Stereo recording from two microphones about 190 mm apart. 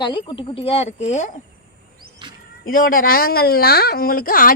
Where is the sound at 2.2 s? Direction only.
25° right (ahead or behind).